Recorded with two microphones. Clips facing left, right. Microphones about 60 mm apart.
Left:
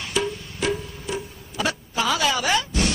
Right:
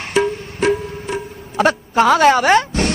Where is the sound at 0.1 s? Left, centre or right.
Right.